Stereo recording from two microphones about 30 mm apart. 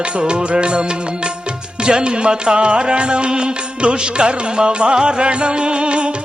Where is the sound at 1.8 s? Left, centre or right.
Right.